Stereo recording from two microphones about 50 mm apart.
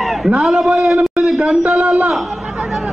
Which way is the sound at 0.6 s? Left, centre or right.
Centre.